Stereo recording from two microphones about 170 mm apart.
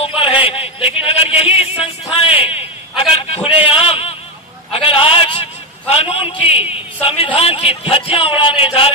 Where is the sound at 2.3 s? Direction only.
35° left (ahead or behind).